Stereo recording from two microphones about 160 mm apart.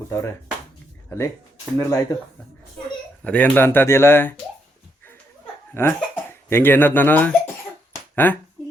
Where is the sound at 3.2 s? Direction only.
10° left (ahead or behind).